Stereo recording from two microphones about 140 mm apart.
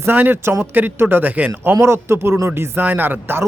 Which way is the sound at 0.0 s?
15° right (ahead or behind).